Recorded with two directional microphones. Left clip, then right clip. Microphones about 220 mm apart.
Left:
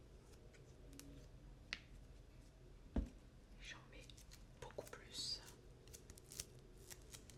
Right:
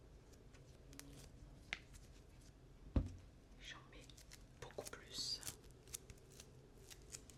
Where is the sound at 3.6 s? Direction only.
5° right (ahead or behind).